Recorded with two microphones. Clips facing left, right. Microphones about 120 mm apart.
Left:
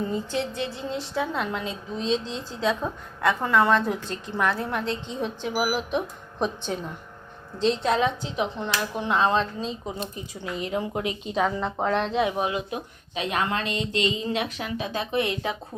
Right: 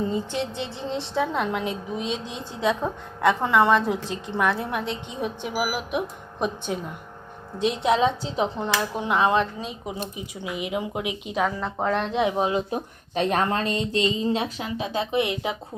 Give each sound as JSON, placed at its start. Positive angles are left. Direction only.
{"t": 0.0, "sound": "a woman's voice", "side_deg": -20}
{"t": 6.7, "sound": "a woman's voice", "side_deg": -10}
{"t": 8.8, "sound": "a woman's voice", "side_deg": -20}
{"t": 12.1, "sound": "a woman's voice", "side_deg": -20}
{"t": 13.1, "sound": "speech", "side_deg": -40}